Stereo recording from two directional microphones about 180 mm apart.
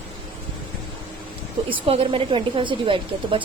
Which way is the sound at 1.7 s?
30° right (ahead or behind).